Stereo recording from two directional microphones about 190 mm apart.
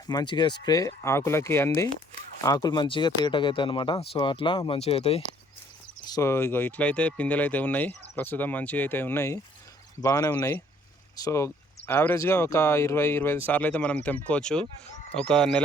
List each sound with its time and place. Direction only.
0.1 s speech: 20° left (ahead or behind)
6.1 s speech: 15° left (ahead or behind)